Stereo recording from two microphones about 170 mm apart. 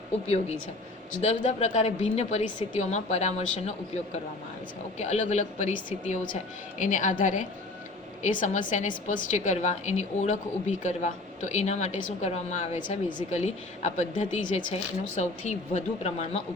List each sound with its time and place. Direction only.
0.3 s a woman's voice: 40° left (ahead or behind)